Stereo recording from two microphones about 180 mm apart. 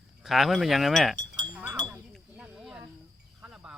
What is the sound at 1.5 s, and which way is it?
Chink, 10° right (ahead or behind).